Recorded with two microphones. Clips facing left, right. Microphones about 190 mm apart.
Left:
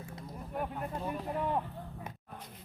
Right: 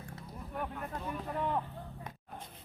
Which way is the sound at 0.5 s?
25° left (ahead or behind).